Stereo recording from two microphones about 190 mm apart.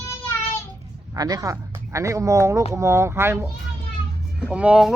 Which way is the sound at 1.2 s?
20° right (ahead or behind).